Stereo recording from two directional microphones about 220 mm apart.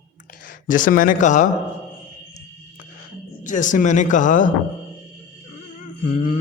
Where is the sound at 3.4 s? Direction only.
35° left (ahead or behind).